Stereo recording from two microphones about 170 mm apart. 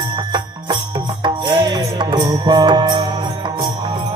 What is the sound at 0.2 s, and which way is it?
Music, 25° right (ahead or behind).